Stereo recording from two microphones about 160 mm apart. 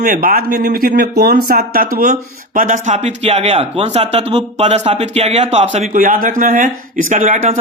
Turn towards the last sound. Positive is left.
turn(degrees=-50)  # may be behind; listen again after turning